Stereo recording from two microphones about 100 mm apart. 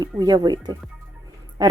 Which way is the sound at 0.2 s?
40° right (ahead or behind).